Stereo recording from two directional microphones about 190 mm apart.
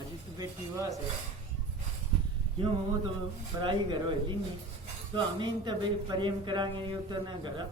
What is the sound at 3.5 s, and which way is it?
Speech, 20° right (ahead or behind).